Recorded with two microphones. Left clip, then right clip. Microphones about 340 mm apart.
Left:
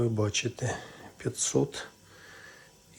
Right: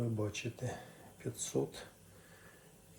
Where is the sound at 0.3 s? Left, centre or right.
Left.